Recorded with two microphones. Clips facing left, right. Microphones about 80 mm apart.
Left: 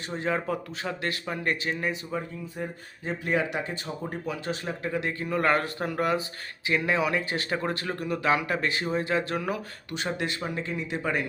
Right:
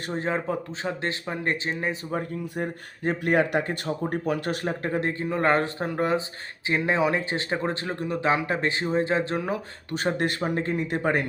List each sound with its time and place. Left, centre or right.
0.1 s speech: right
2.0 s speech: right
9.9 s speech: right